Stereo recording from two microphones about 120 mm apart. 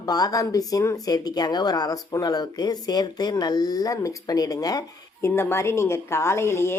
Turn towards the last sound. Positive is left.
turn(degrees=20)  # may be behind; listen again after turning